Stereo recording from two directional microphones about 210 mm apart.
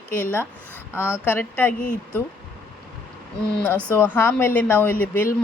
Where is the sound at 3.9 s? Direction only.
10° left (ahead or behind).